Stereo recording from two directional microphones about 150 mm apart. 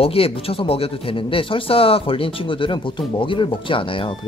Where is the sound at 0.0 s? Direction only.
40° left (ahead or behind).